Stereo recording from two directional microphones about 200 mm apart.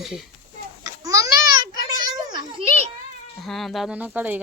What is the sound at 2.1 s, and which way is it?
Children playing, 20° right (ahead or behind).